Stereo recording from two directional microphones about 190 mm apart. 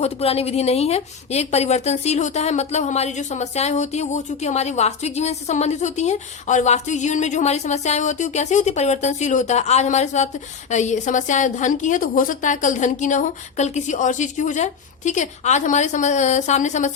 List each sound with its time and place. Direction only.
0.0 s a woman's voice: 30° left (ahead or behind)